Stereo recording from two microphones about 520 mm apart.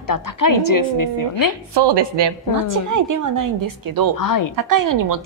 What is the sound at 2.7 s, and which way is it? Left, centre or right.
A woman's voice, right.